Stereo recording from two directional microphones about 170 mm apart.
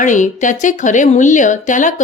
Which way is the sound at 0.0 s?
45° left (ahead or behind).